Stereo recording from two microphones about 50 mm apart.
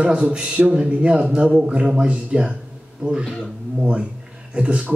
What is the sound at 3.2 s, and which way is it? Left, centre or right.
Speech, centre.